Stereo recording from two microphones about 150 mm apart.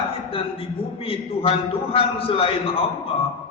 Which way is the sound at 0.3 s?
40° left (ahead or behind).